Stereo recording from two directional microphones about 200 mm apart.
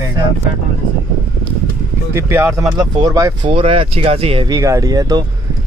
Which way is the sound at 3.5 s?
25° right (ahead or behind).